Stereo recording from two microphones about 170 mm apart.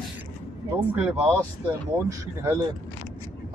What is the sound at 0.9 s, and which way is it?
Speech, 10° right (ahead or behind).